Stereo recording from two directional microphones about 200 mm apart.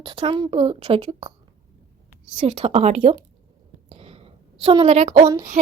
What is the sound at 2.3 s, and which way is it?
Speech, 30° right (ahead or behind).